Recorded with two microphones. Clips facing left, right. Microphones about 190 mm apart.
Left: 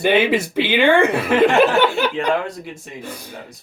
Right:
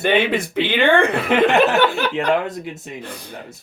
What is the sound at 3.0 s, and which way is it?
Speech, 10° left (ahead or behind).